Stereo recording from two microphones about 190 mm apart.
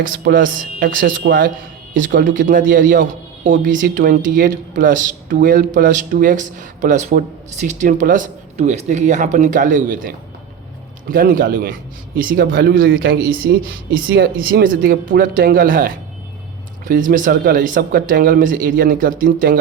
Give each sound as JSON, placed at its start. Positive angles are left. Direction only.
{"t": 0.0, "sound": "a man's voice", "side_deg": -45}